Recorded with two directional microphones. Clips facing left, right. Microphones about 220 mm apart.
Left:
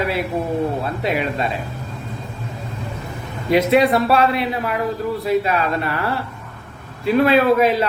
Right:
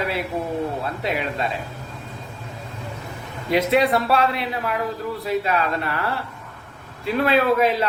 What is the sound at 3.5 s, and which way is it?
Speech, 10° left (ahead or behind).